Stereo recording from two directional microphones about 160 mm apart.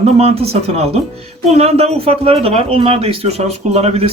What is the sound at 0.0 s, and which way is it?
Speech, 40° right (ahead or behind).